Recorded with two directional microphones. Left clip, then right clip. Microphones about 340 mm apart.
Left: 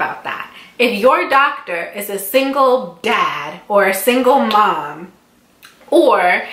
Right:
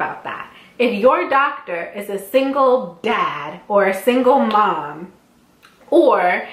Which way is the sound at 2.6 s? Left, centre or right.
Centre.